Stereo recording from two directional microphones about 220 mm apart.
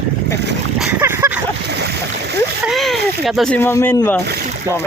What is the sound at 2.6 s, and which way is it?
Speech, centre (ahead or behind).